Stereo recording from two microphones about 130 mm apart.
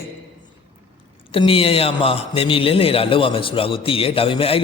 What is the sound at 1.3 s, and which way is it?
A man's voice, 45° left (ahead or behind).